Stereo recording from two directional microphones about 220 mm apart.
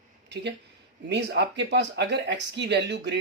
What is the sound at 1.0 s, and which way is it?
Speech, 50° right (ahead or behind).